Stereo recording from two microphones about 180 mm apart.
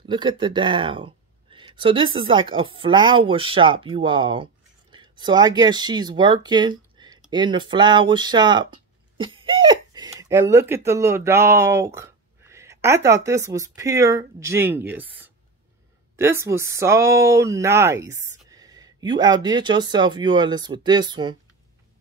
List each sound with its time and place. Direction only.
0.0 s speech: 25° right (ahead or behind)